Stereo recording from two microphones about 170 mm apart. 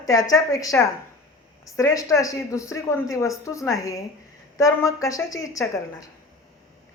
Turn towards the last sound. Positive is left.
turn(degrees=20)  # may be behind; listen again after turning